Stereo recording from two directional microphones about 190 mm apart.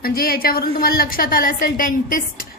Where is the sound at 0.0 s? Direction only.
50° left (ahead or behind).